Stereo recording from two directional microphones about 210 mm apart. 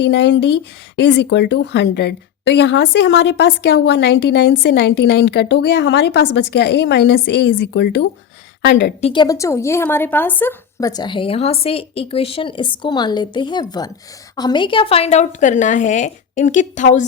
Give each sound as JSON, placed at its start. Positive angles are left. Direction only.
{"t": 0.0, "sound": "speech", "side_deg": 55}
{"t": 9.0, "sound": "a woman's voice", "side_deg": 25}